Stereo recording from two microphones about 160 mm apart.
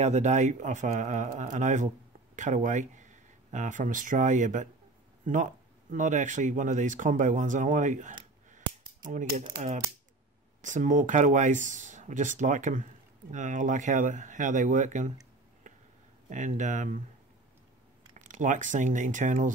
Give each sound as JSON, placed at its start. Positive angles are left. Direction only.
{"t": 0.0, "sound": "speech", "side_deg": -45}
{"t": 10.6, "sound": "speech", "side_deg": -50}
{"t": 15.7, "sound": "a sound", "side_deg": -55}
{"t": 16.3, "sound": "speech", "side_deg": -50}
{"t": 18.1, "sound": "speech", "side_deg": -50}